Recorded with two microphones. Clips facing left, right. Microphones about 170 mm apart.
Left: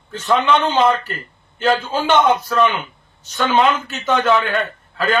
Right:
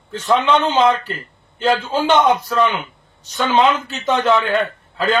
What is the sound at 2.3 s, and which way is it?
Speech, 10° right (ahead or behind).